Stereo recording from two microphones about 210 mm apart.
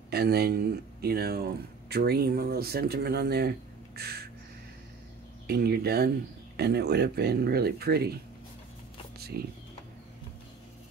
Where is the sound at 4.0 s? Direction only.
50° right (ahead or behind).